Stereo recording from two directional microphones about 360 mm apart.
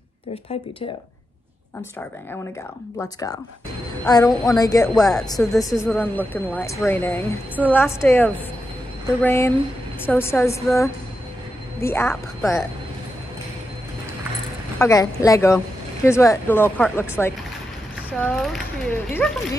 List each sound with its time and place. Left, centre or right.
3.0 s a woman's voice: centre
14.8 s a woman's voice: centre